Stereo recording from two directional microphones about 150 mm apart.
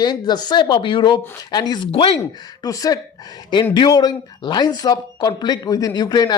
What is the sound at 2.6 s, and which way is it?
Speech, 25° left (ahead or behind).